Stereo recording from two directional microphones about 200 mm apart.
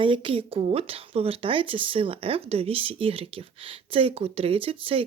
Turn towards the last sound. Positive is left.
turn(degrees=-25)  # may be behind; listen again after turning